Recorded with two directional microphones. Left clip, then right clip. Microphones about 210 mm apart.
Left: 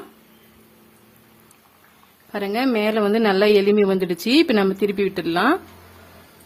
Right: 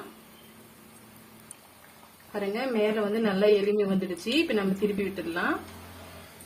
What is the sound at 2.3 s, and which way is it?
A woman's voice, 50° left (ahead or behind).